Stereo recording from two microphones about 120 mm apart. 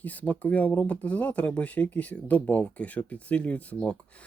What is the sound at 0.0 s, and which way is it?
Speech, 10° left (ahead or behind).